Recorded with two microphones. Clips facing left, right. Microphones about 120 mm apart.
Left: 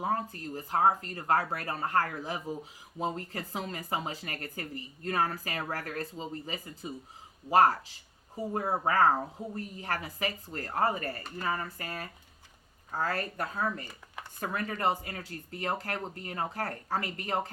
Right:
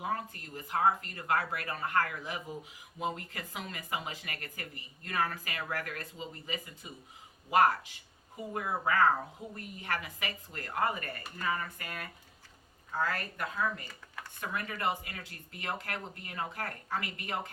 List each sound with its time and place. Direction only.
0.0 s speech: 35° left (ahead or behind)